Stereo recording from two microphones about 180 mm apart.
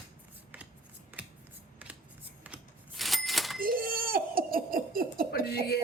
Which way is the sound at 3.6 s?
55° right (ahead or behind).